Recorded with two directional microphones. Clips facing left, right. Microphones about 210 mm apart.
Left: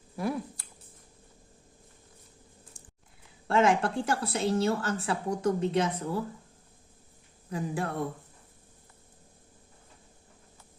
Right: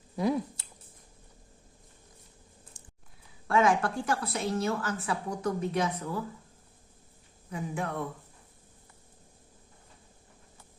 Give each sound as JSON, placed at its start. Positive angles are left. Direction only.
{"t": 0.2, "sound": "speech", "side_deg": -20}
{"t": 2.8, "sound": "a sound", "side_deg": -25}
{"t": 3.4, "sound": "a woman's voice", "side_deg": 25}
{"t": 7.5, "sound": "speech", "side_deg": 35}